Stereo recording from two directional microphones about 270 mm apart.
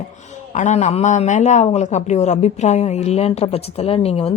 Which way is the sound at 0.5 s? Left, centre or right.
Left.